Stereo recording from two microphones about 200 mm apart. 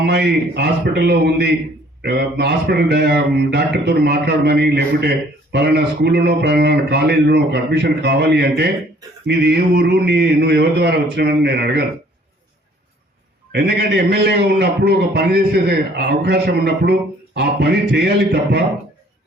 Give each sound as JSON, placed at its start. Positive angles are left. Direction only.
{"t": 0.0, "sound": "a man's voice", "side_deg": -55}
{"t": 13.5, "sound": "a man's voice", "side_deg": -55}